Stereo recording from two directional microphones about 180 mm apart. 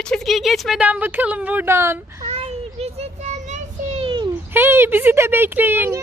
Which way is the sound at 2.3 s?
35° right (ahead or behind).